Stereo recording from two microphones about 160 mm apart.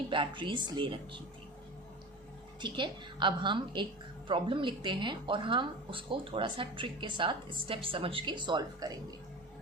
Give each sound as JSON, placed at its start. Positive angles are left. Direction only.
{"t": 0.1, "sound": "speech", "side_deg": -30}
{"t": 2.6, "sound": "a woman's voice", "side_deg": -30}